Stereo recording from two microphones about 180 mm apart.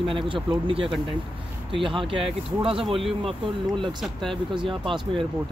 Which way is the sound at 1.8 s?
30° right (ahead or behind).